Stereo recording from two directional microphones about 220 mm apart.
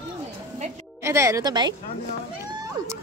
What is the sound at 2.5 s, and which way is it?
Vehicle, 15° right (ahead or behind).